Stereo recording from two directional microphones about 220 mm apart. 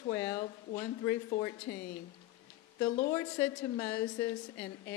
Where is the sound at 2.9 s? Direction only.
30° left (ahead or behind).